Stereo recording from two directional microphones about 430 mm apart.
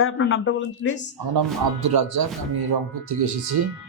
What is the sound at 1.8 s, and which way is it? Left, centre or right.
Speech, right.